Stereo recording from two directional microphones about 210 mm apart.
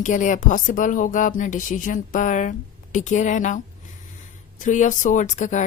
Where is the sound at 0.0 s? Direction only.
35° left (ahead or behind).